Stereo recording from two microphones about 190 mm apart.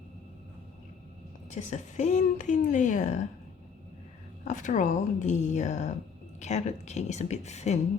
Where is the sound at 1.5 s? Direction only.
40° left (ahead or behind).